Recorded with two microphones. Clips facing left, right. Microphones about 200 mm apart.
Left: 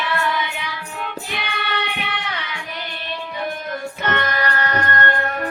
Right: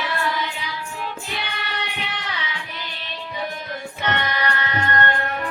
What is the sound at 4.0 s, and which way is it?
Music, 50° left (ahead or behind).